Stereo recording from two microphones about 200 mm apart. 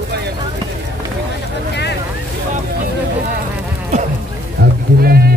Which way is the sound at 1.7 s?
55° left (ahead or behind).